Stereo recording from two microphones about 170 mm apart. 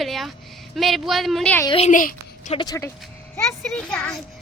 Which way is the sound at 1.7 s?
35° left (ahead or behind).